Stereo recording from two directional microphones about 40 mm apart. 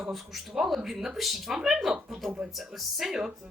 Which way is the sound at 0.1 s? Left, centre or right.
Centre.